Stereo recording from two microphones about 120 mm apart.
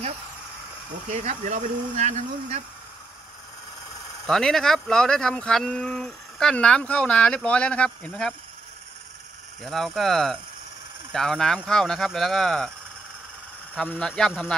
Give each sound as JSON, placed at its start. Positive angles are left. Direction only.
{"t": 1.1, "sound": "speech", "side_deg": -75}
{"t": 4.3, "sound": "speech", "side_deg": 5}
{"t": 9.6, "sound": "speech", "side_deg": 0}
{"t": 13.7, "sound": "speech", "side_deg": 10}